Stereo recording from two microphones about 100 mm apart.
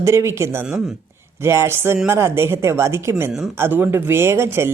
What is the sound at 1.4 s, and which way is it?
A woman's voice, 25° right (ahead or behind).